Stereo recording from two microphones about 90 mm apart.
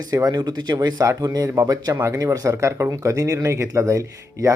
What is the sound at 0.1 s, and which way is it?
Speech, 45° right (ahead or behind).